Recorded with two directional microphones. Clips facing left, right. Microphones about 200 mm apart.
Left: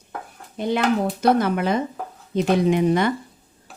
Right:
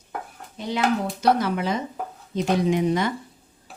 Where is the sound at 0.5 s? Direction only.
55° left (ahead or behind).